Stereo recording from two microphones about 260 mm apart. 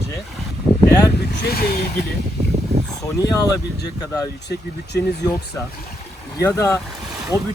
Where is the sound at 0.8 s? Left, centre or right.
Left.